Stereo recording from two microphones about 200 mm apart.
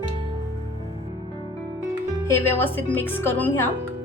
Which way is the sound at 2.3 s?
10° left (ahead or behind).